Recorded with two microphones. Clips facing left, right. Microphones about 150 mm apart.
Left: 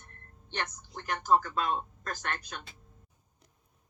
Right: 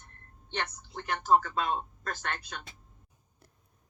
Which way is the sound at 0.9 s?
30° right (ahead or behind).